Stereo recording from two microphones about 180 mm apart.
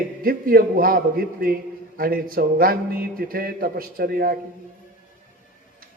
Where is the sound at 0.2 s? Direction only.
55° right (ahead or behind).